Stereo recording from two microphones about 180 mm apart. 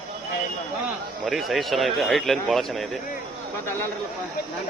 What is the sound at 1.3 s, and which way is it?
A man's voice, centre (ahead or behind).